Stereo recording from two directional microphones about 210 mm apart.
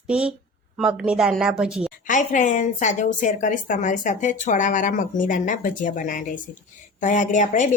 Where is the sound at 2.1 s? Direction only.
35° left (ahead or behind).